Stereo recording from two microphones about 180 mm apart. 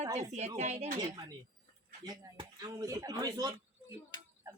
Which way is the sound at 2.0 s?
20° right (ahead or behind).